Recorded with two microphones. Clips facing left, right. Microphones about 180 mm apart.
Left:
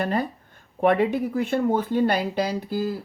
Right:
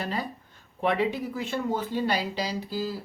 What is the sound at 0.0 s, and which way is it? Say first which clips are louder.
Speech: left 7 dB; 55° left (ahead or behind).